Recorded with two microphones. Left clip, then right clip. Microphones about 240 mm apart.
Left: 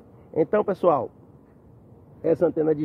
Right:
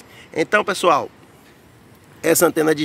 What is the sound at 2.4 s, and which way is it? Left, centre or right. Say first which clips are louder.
Speech: right 6 dB; centre.